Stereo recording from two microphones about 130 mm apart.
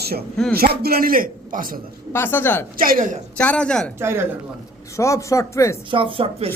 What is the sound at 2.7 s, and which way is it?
Speech, 90° right.